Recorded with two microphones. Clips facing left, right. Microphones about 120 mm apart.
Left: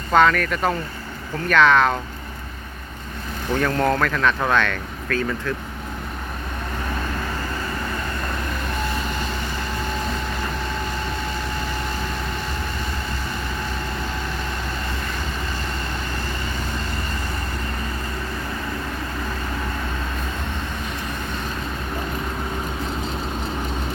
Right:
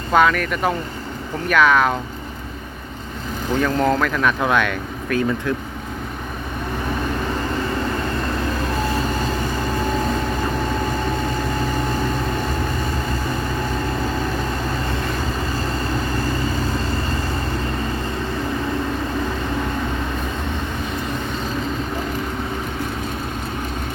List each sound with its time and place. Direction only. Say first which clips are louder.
0.1 s speech: even; 5° right (ahead or behind)
3.5 s speech: right 2 dB; 10° right (ahead or behind)